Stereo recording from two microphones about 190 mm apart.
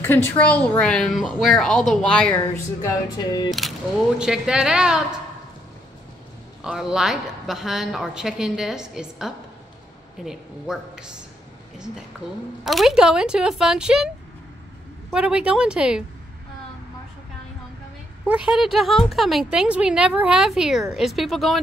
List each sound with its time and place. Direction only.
0.0 s speech: 10° left (ahead or behind)
2.3 s music: 20° left (ahead or behind)
3.4 s single-lens reflex camera: centre (ahead or behind)
4.2 s speech: 5° right (ahead or behind)
6.6 s speech: 5° right (ahead or behind)
12.6 s speech: centre (ahead or behind)
18.2 s speech: 5° right (ahead or behind)